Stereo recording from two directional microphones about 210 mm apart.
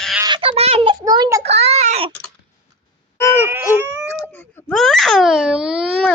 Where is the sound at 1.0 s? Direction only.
15° right (ahead or behind).